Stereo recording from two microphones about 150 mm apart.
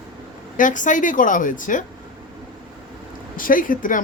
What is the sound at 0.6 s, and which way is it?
Speech, 60° left (ahead or behind).